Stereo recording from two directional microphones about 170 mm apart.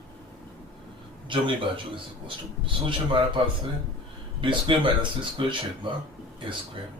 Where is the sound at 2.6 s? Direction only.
30° right (ahead or behind).